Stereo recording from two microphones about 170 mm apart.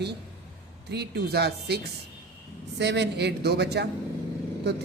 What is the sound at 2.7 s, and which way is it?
A woman's voice, 90° right.